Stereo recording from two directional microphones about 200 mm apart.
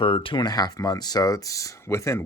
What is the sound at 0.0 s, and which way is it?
Speech, 25° left (ahead or behind).